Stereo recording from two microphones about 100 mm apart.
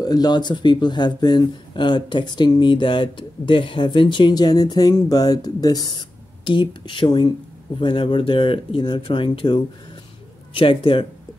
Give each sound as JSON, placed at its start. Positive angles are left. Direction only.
{"t": 0.0, "sound": "speech", "side_deg": 40}